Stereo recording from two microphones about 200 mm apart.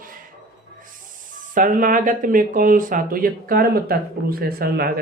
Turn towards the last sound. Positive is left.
turn(degrees=-50)  # may be behind; listen again after turning